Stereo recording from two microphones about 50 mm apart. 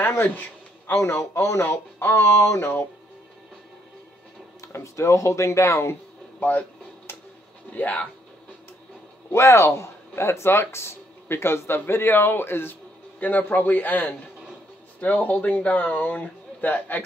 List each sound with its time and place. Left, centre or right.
0.2 s a sound: left
0.9 s speech: left
1.6 s speech: left
2.3 s speech: left
4.6 s speech: left
7.7 s speech: left
9.3 s speech: left
13.2 s speech: left